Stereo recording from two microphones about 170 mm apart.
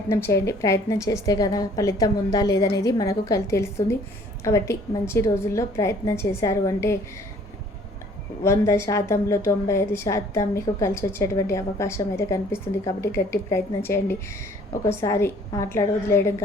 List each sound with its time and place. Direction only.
0.1 s a woman's voice: 15° left (ahead or behind)
8.4 s a woman's voice: 15° left (ahead or behind)